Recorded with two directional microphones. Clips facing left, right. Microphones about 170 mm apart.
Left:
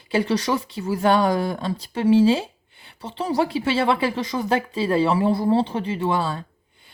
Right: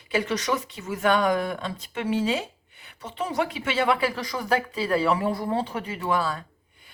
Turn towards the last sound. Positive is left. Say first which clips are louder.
# left 3 dB
turn(degrees=25)  # may be behind; listen again after turning